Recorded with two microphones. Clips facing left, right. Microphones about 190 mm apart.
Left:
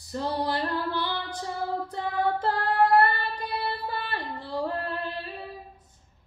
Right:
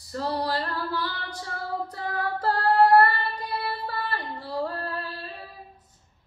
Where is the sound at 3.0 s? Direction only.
20° left (ahead or behind).